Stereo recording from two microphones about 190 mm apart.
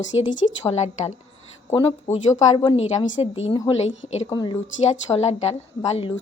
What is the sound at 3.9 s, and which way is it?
Speech, 80° left.